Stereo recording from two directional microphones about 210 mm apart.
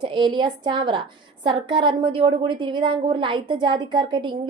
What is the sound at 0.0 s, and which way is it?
A woman's voice, 20° right (ahead or behind).